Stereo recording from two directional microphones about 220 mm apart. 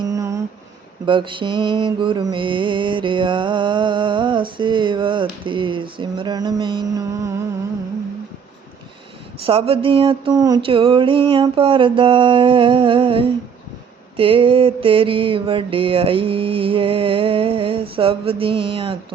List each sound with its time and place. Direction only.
0.1 s a sound: 15° right (ahead or behind)
1.0 s mantra: 20° right (ahead or behind)
9.5 s mantra: 25° right (ahead or behind)